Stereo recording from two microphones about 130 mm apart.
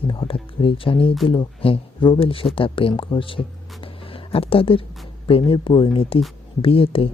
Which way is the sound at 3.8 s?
45° left (ahead or behind).